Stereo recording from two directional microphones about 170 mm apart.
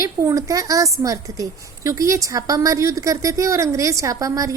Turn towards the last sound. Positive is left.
turn(degrees=-20)  # may be behind; listen again after turning